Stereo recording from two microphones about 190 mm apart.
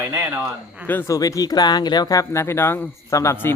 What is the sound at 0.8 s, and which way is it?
Speech, 10° left (ahead or behind).